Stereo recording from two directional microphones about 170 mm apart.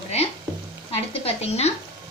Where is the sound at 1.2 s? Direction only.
40° left (ahead or behind).